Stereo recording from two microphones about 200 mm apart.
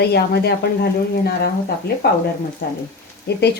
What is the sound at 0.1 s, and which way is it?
A woman's voice, 55° left (ahead or behind).